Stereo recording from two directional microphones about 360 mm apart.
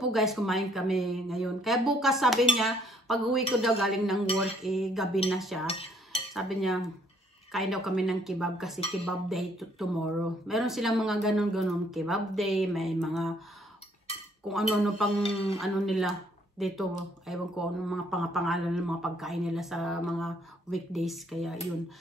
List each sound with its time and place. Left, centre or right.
0.0 s a man's voice: centre
5.7 s cutlery: centre
6.3 s a man's voice: centre
14.5 s a man's voice: centre
15.2 s a sound: centre
15.6 s a man's voice: centre